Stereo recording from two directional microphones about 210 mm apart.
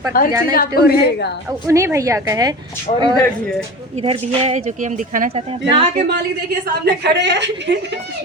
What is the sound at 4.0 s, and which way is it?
Speech, 30° right (ahead or behind).